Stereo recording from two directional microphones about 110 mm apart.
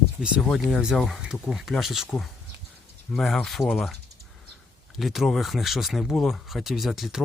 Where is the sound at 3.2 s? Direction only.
5° left (ahead or behind).